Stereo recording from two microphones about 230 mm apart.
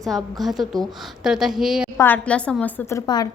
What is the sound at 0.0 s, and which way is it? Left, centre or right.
A woman's voice, centre.